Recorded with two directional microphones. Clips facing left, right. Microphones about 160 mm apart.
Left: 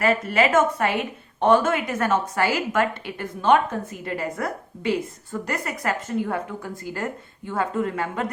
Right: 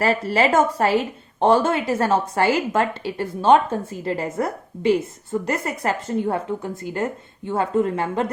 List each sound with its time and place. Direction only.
0.0 s a woman's voice: 35° right (ahead or behind)